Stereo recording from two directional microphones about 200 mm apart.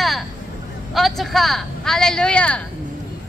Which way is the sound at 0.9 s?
Centre (ahead or behind).